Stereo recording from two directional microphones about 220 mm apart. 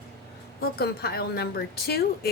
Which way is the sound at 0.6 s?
45° left (ahead or behind).